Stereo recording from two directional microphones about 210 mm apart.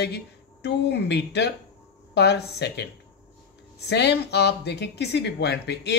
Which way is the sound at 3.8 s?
55° left (ahead or behind).